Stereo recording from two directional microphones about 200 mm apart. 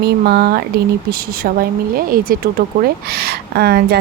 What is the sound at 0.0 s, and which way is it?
A woman's voice, 55° right (ahead or behind).